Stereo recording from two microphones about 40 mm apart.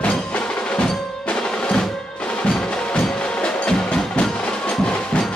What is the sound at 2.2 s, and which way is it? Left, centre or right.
Music, left.